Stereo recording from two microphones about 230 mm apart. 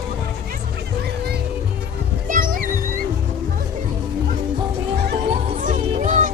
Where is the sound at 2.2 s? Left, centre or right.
Right.